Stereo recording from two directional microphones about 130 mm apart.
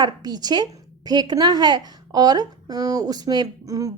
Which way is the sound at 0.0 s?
30° right (ahead or behind).